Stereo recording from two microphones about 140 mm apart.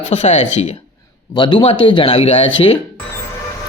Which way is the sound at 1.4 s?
35° left (ahead or behind).